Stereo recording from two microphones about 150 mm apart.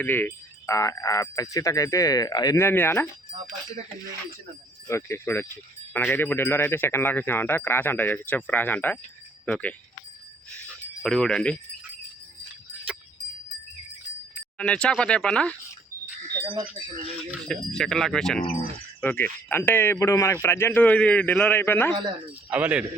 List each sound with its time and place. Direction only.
0.0 s speech: 15° left (ahead or behind)
4.9 s speech: 20° left (ahead or behind)
10.5 s music: 5° left (ahead or behind)
14.6 s speech: 5° left (ahead or behind)
16.5 s wind chime: 35° right (ahead or behind)
17.5 s speech: 5° left (ahead or behind)
19.0 s speech: 15° left (ahead or behind)
21.9 s wind chime: 30° right (ahead or behind)
22.4 s a man's voice: 10° right (ahead or behind)